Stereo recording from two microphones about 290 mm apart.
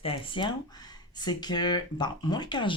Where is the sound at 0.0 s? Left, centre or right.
Centre.